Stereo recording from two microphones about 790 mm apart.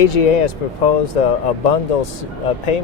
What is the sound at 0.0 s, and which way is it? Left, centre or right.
Speech, left.